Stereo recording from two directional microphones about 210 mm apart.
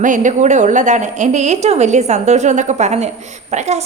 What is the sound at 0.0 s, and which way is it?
A woman's voice, 35° right (ahead or behind).